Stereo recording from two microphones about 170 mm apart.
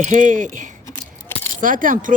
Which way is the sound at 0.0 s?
45° right (ahead or behind).